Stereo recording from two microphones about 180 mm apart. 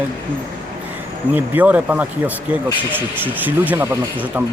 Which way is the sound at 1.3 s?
10° right (ahead or behind).